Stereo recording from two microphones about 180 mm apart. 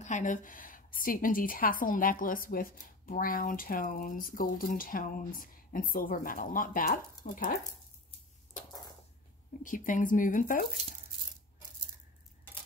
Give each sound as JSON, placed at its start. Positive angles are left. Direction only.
{"t": 0.0, "sound": "a woman's voice", "side_deg": 45}
{"t": 9.6, "sound": "a woman's voice", "side_deg": 50}